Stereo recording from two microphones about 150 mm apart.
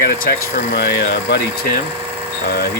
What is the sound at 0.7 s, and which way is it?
Speech, 90° left.